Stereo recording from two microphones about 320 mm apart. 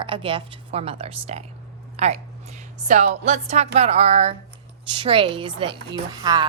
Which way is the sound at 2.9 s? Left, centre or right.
Right.